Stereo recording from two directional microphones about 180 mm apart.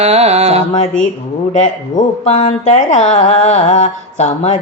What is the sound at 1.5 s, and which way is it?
Speech, 40° left (ahead or behind).